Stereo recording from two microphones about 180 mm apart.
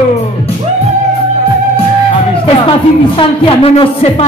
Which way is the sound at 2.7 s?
25° left (ahead or behind).